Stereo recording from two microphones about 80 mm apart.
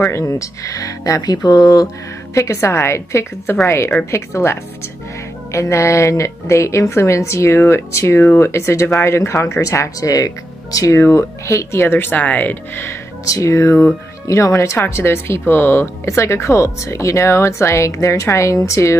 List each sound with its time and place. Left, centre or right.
0.0 s speech: left
2.3 s speech: left
9.6 s speech: left
12.8 s speech: left